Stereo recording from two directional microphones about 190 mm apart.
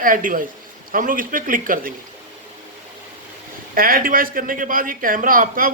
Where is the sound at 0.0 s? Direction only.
45° right (ahead or behind).